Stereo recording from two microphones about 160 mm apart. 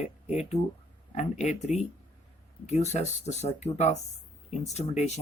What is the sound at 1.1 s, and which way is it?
Speech, 45° left (ahead or behind).